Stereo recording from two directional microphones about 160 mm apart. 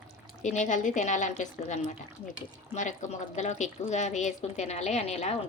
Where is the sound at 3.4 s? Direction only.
45° left (ahead or behind).